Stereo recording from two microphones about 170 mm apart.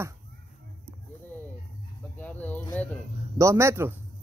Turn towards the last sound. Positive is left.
turn(degrees=-15)  # may be behind; listen again after turning